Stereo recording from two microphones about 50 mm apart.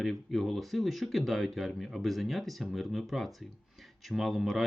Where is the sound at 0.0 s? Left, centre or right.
Centre.